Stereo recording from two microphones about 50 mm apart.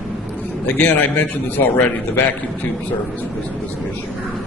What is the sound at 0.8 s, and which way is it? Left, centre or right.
Speech, left.